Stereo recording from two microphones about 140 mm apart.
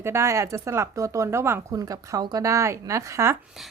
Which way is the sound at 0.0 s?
20° right (ahead or behind).